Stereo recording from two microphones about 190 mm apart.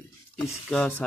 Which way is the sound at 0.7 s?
5° left (ahead or behind).